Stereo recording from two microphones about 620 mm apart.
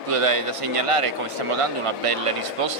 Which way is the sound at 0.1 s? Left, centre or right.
Right.